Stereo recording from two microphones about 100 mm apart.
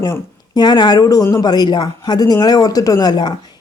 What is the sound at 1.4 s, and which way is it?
Speech, 45° left (ahead or behind).